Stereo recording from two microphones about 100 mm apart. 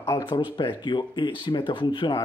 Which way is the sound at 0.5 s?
55° left (ahead or behind).